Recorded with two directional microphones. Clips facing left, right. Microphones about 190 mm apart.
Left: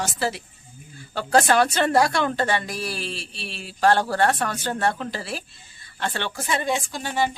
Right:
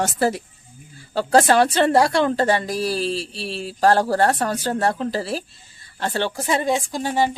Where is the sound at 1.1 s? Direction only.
30° right (ahead or behind).